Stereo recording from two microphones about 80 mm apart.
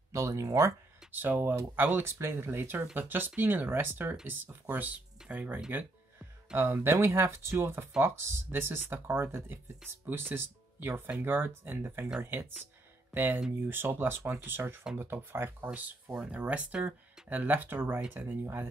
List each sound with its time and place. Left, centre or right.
0.1 s speech: right
1.1 s speech: right
16.2 s speech: centre